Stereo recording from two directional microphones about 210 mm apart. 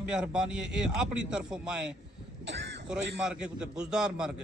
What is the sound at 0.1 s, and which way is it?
A man's voice, 5° right (ahead or behind).